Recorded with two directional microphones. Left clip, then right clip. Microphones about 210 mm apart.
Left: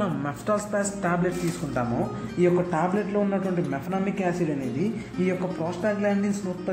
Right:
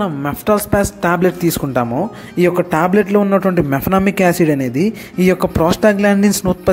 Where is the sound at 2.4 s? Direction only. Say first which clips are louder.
Right 9 dB; 45° right (ahead or behind).